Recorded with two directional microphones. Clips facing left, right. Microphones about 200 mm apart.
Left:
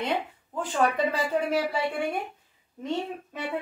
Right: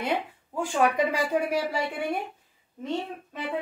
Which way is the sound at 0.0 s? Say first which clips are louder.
Even; 10° right (ahead or behind).